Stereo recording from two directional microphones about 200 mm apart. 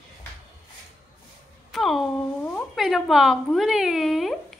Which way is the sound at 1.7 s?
Centre (ahead or behind).